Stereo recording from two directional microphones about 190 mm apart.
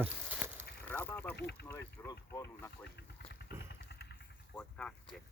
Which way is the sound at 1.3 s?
60° left (ahead or behind).